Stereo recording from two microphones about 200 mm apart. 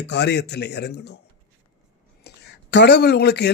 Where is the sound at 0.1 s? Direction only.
60° left (ahead or behind).